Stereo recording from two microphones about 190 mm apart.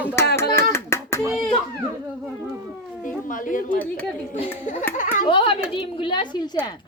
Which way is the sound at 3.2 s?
45° left (ahead or behind).